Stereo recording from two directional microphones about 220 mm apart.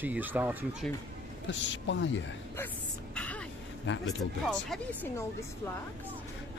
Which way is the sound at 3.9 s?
55° left (ahead or behind).